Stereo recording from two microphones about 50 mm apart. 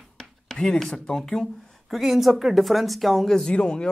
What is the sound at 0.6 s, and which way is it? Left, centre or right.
Speech, centre.